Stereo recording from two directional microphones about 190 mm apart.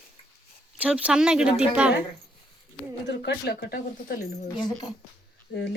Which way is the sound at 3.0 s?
60° left (ahead or behind).